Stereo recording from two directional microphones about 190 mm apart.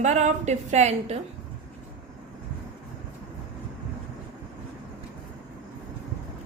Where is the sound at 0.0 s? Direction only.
40° right (ahead or behind).